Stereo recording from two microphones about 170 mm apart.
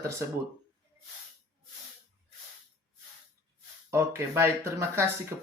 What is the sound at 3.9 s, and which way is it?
Speech, 15° right (ahead or behind).